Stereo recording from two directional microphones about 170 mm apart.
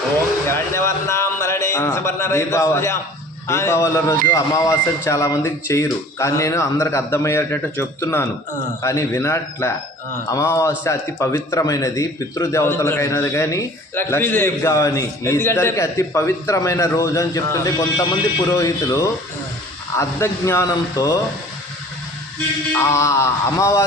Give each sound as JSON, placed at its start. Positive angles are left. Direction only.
{"t": 0.4, "sound": "a sound", "side_deg": 15}
{"t": 3.4, "sound": "a man's voice", "side_deg": 15}
{"t": 22.7, "sound": "a man's voice", "side_deg": 15}